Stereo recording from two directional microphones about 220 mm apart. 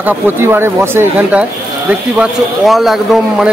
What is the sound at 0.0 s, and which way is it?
Speech, 10° right (ahead or behind).